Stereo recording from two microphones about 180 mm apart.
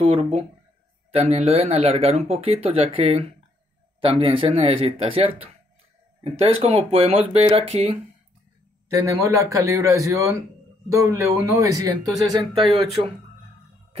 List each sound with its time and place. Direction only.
0.0 s speech: 30° right (ahead or behind)
8.8 s speech: 20° right (ahead or behind)